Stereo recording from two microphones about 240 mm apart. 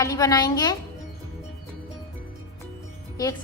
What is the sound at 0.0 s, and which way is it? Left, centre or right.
Speech, centre.